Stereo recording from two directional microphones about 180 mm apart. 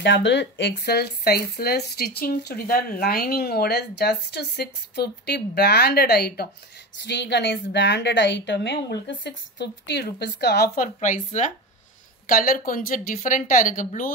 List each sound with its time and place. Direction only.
0.0 s speech: 75° left (ahead or behind)
11.0 s speech: 45° left (ahead or behind)